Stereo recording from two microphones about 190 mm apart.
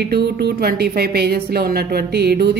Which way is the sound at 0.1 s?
55° right (ahead or behind).